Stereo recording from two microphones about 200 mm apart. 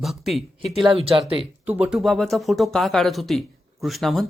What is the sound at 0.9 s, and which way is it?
Speech, 30° right (ahead or behind).